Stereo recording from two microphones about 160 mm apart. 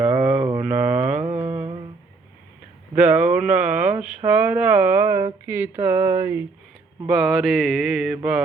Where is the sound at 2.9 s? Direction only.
10° right (ahead or behind).